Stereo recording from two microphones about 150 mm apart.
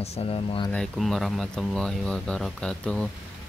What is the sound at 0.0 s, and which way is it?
Speech, 40° left (ahead or behind).